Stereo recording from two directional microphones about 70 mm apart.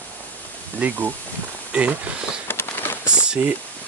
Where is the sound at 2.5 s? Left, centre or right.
Left.